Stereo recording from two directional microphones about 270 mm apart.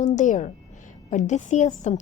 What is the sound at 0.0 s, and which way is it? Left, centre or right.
A woman's voice, left.